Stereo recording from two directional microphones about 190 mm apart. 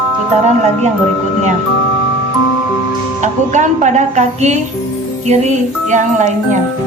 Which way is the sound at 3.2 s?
40° right (ahead or behind).